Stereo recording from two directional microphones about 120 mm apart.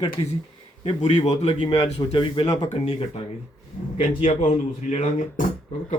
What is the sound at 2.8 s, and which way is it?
Speech, 50° left (ahead or behind).